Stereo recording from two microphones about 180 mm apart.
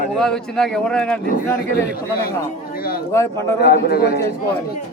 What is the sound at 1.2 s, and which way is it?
Speech, 50° left (ahead or behind).